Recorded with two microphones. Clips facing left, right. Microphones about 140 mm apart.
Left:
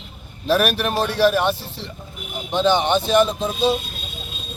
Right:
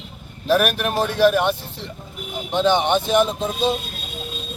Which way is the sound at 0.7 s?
10° right (ahead or behind).